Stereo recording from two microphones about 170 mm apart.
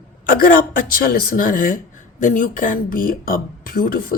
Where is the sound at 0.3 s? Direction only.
55° left (ahead or behind).